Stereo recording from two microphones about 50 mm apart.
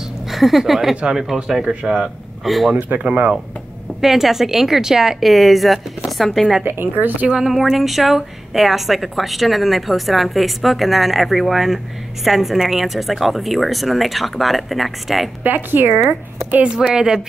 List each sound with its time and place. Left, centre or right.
0.3 s a woman's voice: centre
1.8 s speech: right
2.4 s a woman's voice: centre
2.7 s speech: right
4.0 s a woman's voice: centre
6.6 s speech: right
7.2 s speech: centre
7.5 s a woman's voice: centre
15.4 s speech: right
16.6 s a woman's voice: centre